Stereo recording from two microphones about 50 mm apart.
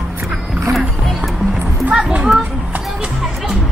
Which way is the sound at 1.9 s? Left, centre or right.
Right.